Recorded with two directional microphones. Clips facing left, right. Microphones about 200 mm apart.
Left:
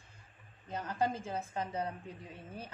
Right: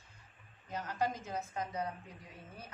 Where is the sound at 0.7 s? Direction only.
30° left (ahead or behind).